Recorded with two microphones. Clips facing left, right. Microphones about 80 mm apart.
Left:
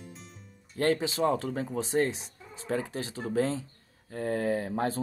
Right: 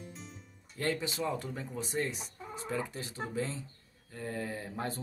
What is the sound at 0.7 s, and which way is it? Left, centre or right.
Music, left.